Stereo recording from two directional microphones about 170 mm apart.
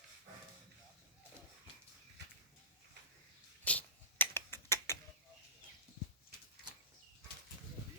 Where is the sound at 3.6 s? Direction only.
10° left (ahead or behind).